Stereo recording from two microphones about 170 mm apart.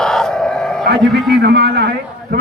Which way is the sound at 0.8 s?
65° right (ahead or behind).